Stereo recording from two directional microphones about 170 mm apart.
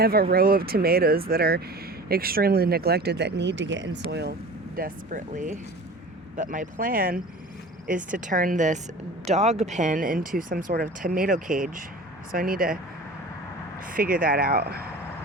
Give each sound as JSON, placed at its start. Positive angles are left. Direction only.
{"t": 0.0, "sound": "speech", "side_deg": -60}
{"t": 13.8, "sound": "speech", "side_deg": -55}